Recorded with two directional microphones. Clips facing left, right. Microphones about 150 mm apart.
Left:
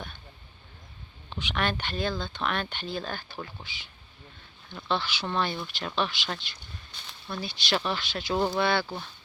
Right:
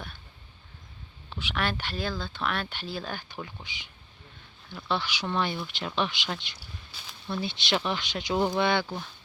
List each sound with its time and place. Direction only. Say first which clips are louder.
1.3 s speech: left 1 dB; 5° right (ahead or behind)
4.7 s speech: left 1 dB; 5° right (ahead or behind)
6.6 s snake: even; 5° right (ahead or behind)
7.4 s speech: even; 20° right (ahead or behind)
8.8 s speech: even; centre (ahead or behind)